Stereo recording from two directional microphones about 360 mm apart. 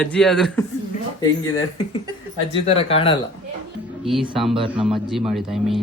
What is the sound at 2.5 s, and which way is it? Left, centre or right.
Speech, centre.